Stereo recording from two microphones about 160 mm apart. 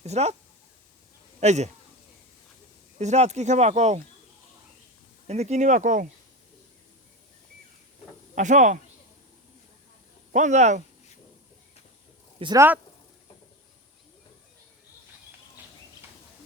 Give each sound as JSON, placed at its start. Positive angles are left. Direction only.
{"t": 0.0, "sound": "speech", "side_deg": -45}
{"t": 1.4, "sound": "speech", "side_deg": -45}
{"t": 3.0, "sound": "speech", "side_deg": -45}
{"t": 5.3, "sound": "speech", "side_deg": -45}
{"t": 8.4, "sound": "speech", "side_deg": -50}
{"t": 10.3, "sound": "speech", "side_deg": -50}
{"t": 12.5, "sound": "speech", "side_deg": -10}